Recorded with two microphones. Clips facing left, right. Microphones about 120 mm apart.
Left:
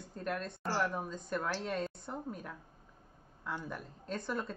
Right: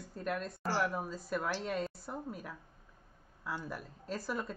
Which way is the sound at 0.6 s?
5° right (ahead or behind).